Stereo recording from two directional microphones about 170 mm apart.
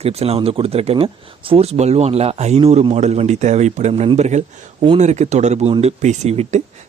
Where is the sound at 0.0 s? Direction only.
35° right (ahead or behind).